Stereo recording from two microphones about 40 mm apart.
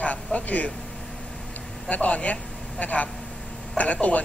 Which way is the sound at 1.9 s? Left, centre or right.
Left.